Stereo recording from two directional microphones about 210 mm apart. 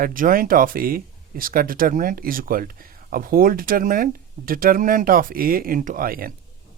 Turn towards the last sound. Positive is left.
turn(degrees=-45)  # may be behind; listen again after turning